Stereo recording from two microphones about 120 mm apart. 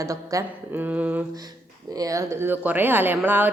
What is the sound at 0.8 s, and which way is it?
Speech, 15° right (ahead or behind).